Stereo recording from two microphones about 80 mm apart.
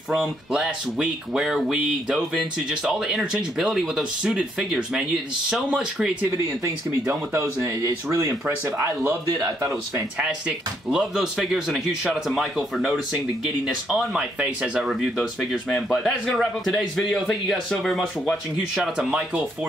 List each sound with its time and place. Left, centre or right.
0.1 s speech: centre
6.6 s speech: right
10.9 s speech: centre
15.7 s speech: centre